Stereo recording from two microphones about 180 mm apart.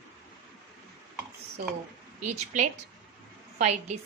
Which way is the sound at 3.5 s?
40° right (ahead or behind).